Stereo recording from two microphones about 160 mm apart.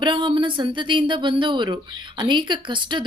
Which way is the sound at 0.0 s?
30° right (ahead or behind).